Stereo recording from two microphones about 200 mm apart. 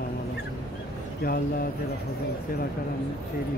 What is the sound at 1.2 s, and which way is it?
Speech, 45° left (ahead or behind).